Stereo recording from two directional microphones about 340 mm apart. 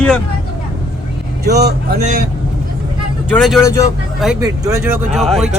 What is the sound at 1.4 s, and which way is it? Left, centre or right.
Speech, right.